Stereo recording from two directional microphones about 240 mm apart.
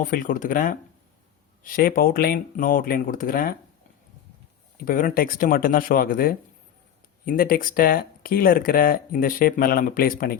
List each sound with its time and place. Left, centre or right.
0.0 s speech: left
4.8 s speech: left